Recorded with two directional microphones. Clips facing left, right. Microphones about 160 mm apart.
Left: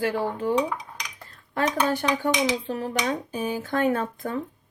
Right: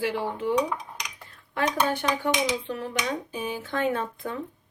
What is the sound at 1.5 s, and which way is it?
Speech, 40° left (ahead or behind).